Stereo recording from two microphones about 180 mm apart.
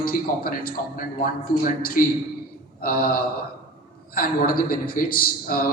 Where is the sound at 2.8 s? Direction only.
55° left (ahead or behind).